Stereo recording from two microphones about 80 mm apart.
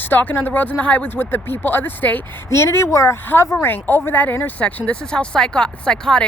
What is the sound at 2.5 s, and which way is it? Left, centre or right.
Speech, left.